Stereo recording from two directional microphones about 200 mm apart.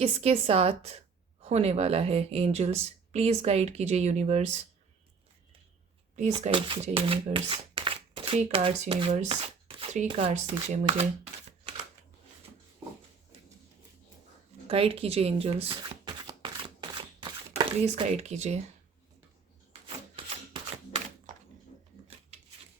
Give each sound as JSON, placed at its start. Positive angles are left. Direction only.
{"t": 0.0, "sound": "speech", "side_deg": -30}
{"t": 6.1, "sound": "speech", "side_deg": -35}
{"t": 14.7, "sound": "shuffling cards", "side_deg": -30}
{"t": 21.3, "sound": "a sound", "side_deg": -40}